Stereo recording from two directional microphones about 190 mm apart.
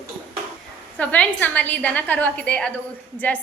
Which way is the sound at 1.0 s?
5° left (ahead or behind).